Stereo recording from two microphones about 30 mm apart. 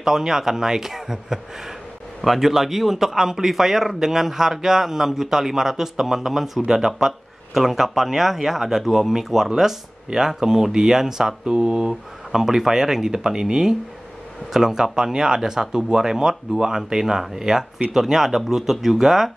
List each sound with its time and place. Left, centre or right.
0.0 s a man's voice: centre
3.5 s a man's voice: centre
6.6 s speech: right
6.9 s a man's voice: centre